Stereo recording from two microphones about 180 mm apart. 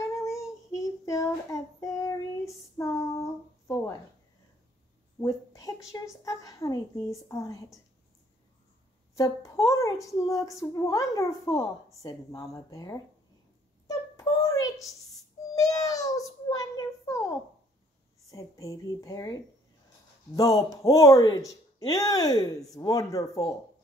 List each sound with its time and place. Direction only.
0.1 s child singing: 15° left (ahead or behind)
5.2 s a woman's voice: 20° left (ahead or behind)
9.1 s speech: 15° left (ahead or behind)
13.8 s a sound: 15° left (ahead or behind)
15.1 s child singing: 20° left (ahead or behind)
18.3 s speech: 15° left (ahead or behind)
20.3 s speech: 20° left (ahead or behind)